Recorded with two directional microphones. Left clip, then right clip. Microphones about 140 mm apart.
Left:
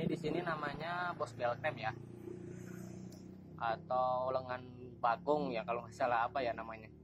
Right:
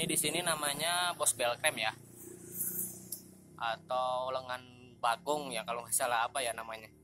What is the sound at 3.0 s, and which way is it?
Speech, 10° right (ahead or behind).